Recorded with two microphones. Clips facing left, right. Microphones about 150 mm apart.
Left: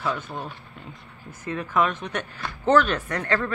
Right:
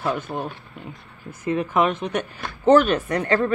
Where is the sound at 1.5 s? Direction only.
15° right (ahead or behind).